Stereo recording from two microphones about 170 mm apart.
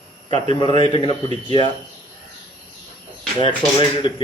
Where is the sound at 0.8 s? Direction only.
30° left (ahead or behind).